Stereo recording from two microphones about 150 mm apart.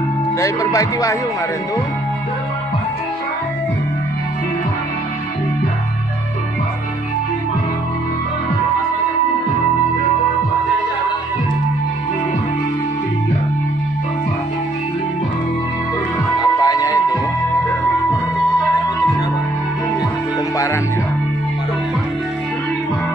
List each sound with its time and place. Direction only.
0.4 s speech: 20° left (ahead or behind)
16.3 s music: 25° left (ahead or behind)